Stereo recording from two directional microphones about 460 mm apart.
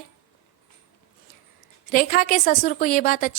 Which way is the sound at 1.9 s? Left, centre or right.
Centre.